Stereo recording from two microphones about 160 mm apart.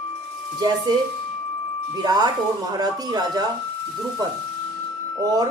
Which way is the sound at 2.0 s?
25° right (ahead or behind).